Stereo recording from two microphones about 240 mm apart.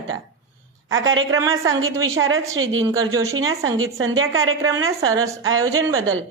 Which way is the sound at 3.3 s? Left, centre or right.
Right.